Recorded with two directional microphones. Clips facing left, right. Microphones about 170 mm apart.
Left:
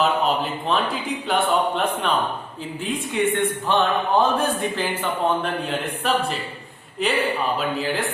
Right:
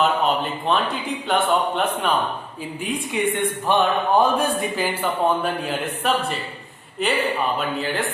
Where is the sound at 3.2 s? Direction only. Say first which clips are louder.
Left 2 dB; 15° right (ahead or behind).